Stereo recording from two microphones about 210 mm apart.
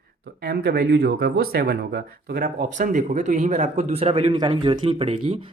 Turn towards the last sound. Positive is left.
turn(degrees=-30)  # may be behind; listen again after turning